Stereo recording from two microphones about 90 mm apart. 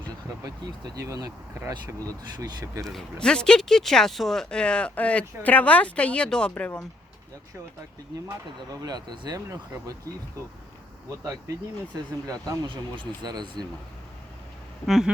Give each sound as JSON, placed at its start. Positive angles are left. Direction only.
{"t": 0.9, "sound": "speech", "side_deg": -40}
{"t": 2.8, "sound": "speech", "side_deg": 5}
{"t": 8.7, "sound": "speech", "side_deg": -45}
{"t": 9.5, "sound": "speech", "side_deg": -35}
{"t": 12.2, "sound": "speech", "side_deg": -40}
{"t": 12.6, "sound": "speech", "side_deg": -65}
{"t": 14.8, "sound": "a sound", "side_deg": 0}